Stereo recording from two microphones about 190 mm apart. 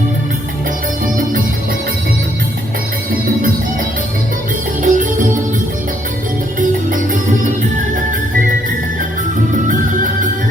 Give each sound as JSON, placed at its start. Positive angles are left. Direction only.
{"t": 4.8, "sound": "music", "side_deg": -45}
{"t": 6.6, "sound": "music", "side_deg": -45}
{"t": 9.6, "sound": "music", "side_deg": -45}